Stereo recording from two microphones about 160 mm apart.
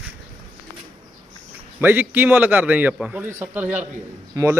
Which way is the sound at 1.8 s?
10° right (ahead or behind).